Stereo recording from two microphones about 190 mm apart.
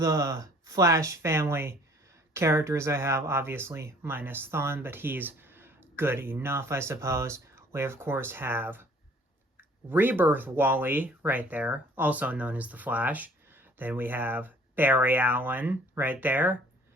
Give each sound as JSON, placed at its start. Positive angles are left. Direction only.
{"t": 0.0, "sound": "speech", "side_deg": -20}